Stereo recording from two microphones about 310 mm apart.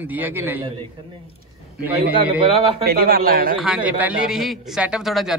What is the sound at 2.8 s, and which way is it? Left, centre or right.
Speech, right.